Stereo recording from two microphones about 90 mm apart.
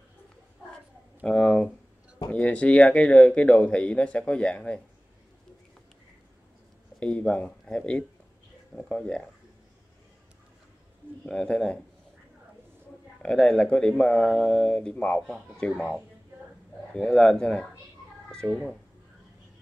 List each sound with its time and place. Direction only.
1.2 s speech: 10° left (ahead or behind)
7.0 s speech: 15° left (ahead or behind)
11.2 s speech: 10° left (ahead or behind)
13.2 s speech: 10° left (ahead or behind)
15.7 s speech: 5° right (ahead or behind)
16.9 s speech: 10° left (ahead or behind)